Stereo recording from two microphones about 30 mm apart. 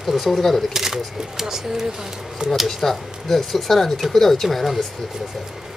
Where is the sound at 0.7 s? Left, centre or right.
Centre.